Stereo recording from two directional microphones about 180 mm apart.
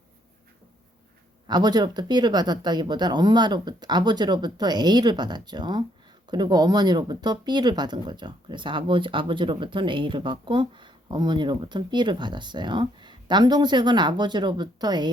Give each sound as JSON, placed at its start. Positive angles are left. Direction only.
{"t": 1.5, "sound": "speech", "side_deg": -25}